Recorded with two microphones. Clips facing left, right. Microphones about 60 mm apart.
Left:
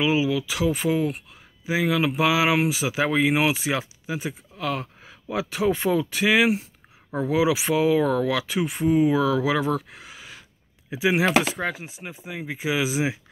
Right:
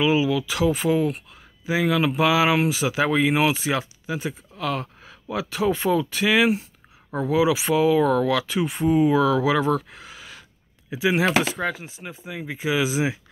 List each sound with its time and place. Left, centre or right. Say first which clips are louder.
0.0 s speech: right 2 dB; centre
11.2 s speech: even; centre
11.6 s speech: right 1 dB; left; by 13.2 s centre